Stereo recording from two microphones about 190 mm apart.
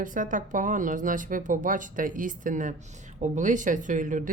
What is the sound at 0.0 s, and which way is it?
A woman's voice, 45° right (ahead or behind).